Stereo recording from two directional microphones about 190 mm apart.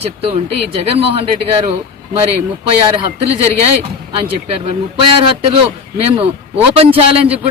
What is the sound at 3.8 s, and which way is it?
Speech, 30° right (ahead or behind).